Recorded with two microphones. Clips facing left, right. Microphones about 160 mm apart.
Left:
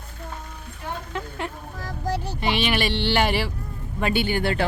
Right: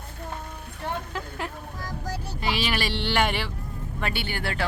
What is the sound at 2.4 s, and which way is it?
Speech, centre (ahead or behind).